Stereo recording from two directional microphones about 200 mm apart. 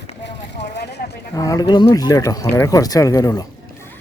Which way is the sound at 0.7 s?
55° left (ahead or behind).